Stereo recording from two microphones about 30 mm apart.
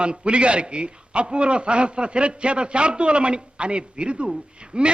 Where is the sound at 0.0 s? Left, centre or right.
Right.